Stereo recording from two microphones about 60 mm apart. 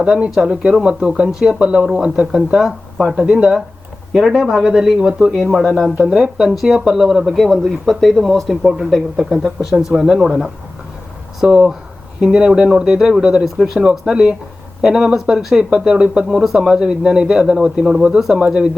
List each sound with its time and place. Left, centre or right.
0.0 s speech: centre
6.1 s speech: centre
14.1 s speech: centre